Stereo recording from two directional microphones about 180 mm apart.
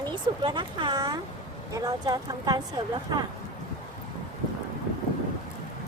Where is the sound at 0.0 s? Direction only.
25° right (ahead or behind).